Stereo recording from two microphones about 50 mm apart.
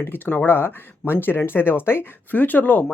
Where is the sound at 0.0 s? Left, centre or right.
Left.